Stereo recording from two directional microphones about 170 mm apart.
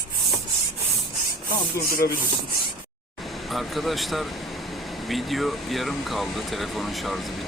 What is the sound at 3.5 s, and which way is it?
Speech, centre (ahead or behind).